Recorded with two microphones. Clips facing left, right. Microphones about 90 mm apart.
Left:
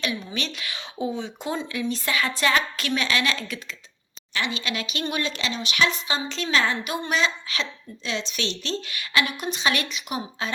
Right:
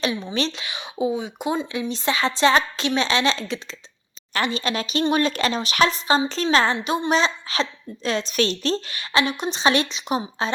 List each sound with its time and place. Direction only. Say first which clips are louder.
0.0 s a woman's voice: right 5 dB; 30° right (ahead or behind)
4.4 s a woman's voice: right 5 dB; 40° right (ahead or behind)
5.1 s a woman's voice: right 6 dB; 45° right (ahead or behind); by 10.5 s 30° right (ahead or behind)